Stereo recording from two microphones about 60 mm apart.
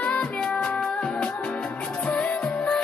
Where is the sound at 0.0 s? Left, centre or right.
Left.